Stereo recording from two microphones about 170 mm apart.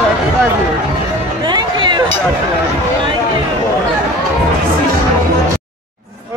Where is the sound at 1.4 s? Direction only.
25° right (ahead or behind).